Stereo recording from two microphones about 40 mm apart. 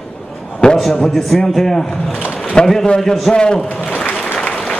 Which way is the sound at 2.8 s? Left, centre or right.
Centre.